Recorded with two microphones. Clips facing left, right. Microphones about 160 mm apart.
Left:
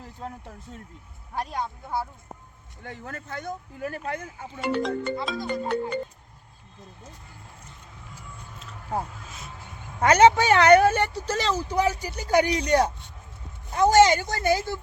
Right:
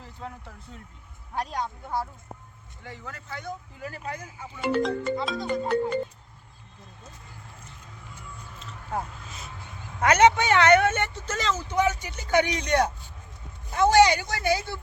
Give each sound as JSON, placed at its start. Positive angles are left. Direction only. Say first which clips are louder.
{"t": 0.0, "sound": "a sound", "louder": "left 2 dB", "side_deg": 45}
{"t": 1.4, "sound": "speech", "louder": "even", "side_deg": 10}
{"t": 2.8, "sound": "speech", "louder": "left 3 dB", "side_deg": 50}
{"t": 4.6, "sound": "music", "louder": "right 1 dB", "side_deg": 0}
{"t": 10.0, "sound": "speech", "louder": "left 2 dB", "side_deg": 30}